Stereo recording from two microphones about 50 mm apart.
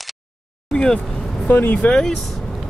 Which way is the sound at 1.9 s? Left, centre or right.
Centre.